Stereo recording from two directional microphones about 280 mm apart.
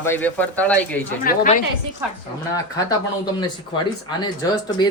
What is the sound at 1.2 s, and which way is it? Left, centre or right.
Speech, left.